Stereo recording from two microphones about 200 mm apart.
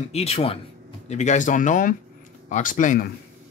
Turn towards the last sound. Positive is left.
turn(degrees=40)  # may be behind; listen again after turning